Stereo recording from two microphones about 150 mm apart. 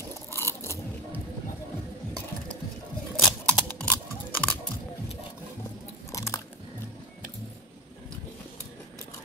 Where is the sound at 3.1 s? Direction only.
5° left (ahead or behind).